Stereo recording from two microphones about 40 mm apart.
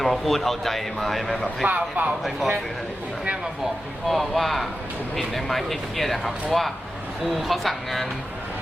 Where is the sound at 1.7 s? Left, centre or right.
Right.